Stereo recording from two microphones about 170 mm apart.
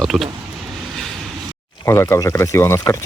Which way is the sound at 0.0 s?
Centre (ahead or behind).